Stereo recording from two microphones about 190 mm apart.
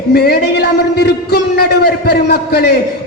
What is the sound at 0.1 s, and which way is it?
A man's voice, 55° left (ahead or behind).